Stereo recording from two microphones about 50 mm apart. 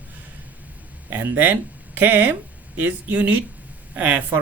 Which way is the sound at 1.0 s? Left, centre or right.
Right.